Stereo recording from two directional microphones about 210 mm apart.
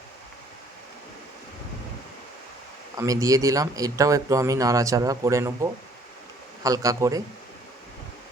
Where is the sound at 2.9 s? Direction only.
15° right (ahead or behind).